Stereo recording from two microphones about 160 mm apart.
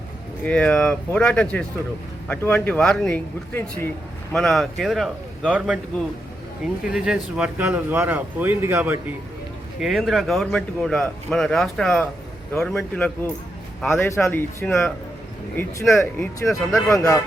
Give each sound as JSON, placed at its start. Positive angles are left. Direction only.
{"t": 0.4, "sound": "speech", "side_deg": 10}
{"t": 4.4, "sound": "speech", "side_deg": 0}
{"t": 6.8, "sound": "speech", "side_deg": -5}
{"t": 9.8, "sound": "speech", "side_deg": 0}
{"t": 13.9, "sound": "speech", "side_deg": 15}